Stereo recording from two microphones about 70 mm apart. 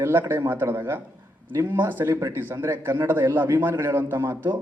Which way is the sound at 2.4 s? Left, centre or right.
Right.